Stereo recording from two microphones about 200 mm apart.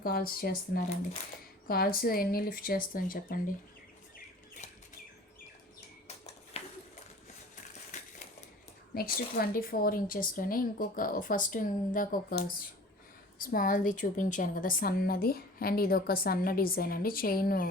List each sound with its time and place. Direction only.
0.0 s a woman's voice: 45° left (ahead or behind)
6.1 s a sound: 30° left (ahead or behind)
9.0 s a woman's voice: 45° left (ahead or behind)